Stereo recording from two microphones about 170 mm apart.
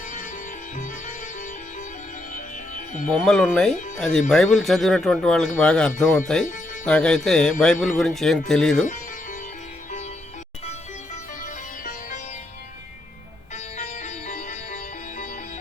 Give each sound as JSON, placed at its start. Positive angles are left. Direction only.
{"t": 2.3, "sound": "music", "side_deg": 50}
{"t": 3.1, "sound": "speech", "side_deg": 5}
{"t": 10.7, "sound": "music", "side_deg": 45}
{"t": 13.7, "sound": "music", "side_deg": 45}